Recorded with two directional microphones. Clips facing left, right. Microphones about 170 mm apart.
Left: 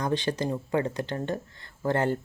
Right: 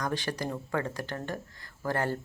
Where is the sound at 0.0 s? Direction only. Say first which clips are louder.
Left 5 dB; 20° left (ahead or behind).